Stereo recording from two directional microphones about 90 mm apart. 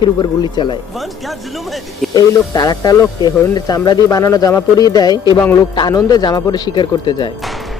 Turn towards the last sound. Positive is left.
turn(degrees=50)  # may be behind; listen again after turning